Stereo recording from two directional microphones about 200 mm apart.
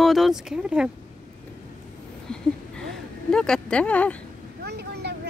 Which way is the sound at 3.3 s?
5° left (ahead or behind).